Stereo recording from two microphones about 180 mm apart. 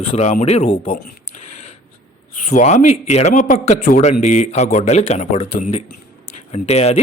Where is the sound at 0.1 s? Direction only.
40° left (ahead or behind).